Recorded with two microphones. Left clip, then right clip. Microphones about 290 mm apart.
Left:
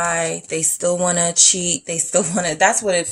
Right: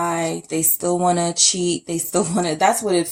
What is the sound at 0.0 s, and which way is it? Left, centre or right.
Speech, left.